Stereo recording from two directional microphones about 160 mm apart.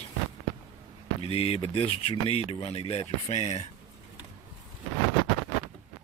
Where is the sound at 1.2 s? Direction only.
40° left (ahead or behind).